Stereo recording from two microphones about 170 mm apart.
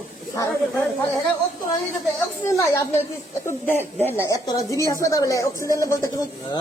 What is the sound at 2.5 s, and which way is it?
Speech, 15° left (ahead or behind).